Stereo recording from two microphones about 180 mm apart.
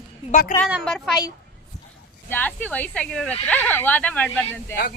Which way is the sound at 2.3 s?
10° left (ahead or behind).